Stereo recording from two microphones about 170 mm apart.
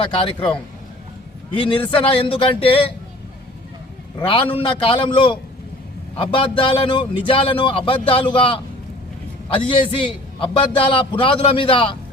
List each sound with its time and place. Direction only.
0.3 s a man's voice: 30° left (ahead or behind)
4.2 s a man's voice: 30° left (ahead or behind)